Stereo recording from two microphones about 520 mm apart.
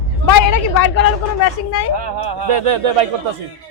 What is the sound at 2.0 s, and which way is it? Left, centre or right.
Speech, right.